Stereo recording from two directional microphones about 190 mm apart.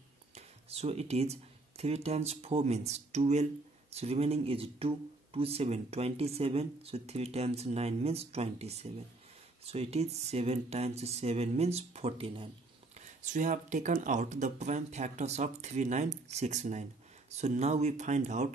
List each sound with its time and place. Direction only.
0.3 s speech: 35° right (ahead or behind)